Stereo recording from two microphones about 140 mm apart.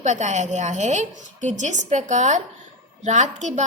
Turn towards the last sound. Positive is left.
turn(degrees=-55)  # may be behind; listen again after turning